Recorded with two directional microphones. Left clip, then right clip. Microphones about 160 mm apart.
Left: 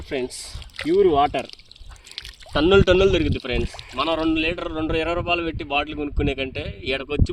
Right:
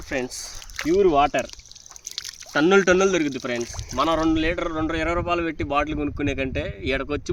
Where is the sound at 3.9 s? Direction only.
25° right (ahead or behind).